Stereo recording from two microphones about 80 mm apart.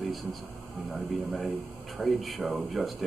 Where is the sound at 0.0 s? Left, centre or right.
Centre.